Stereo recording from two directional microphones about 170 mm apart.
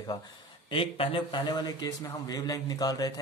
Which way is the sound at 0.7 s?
30° left (ahead or behind).